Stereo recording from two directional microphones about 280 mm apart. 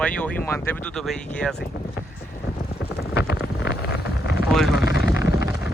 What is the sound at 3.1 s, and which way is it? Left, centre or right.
Wind noise, left.